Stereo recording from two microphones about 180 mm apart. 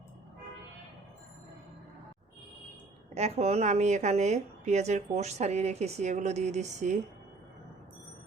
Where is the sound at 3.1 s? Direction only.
35° right (ahead or behind).